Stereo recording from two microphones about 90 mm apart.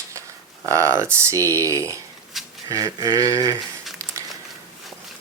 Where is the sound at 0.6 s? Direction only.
35° right (ahead or behind).